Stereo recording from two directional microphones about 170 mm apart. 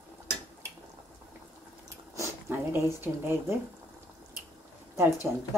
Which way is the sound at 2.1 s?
10° right (ahead or behind).